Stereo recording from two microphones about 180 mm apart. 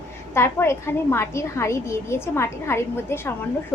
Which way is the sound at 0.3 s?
15° left (ahead or behind).